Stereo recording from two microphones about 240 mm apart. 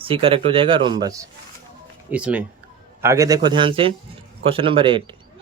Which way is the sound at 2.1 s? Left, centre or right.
Centre.